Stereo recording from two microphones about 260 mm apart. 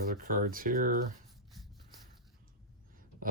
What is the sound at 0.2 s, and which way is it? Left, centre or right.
Speech, right.